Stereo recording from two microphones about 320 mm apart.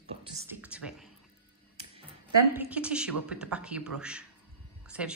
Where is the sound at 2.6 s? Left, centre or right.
Centre.